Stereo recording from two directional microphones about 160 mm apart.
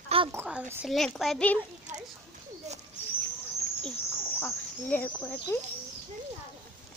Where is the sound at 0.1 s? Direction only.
35° right (ahead or behind).